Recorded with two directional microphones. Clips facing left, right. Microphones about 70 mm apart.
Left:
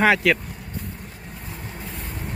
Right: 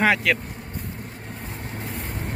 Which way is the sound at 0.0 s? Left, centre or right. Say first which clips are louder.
Left 2 dB; centre.